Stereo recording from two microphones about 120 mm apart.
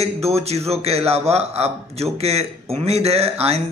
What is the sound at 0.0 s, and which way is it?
A man's voice, 60° right (ahead or behind).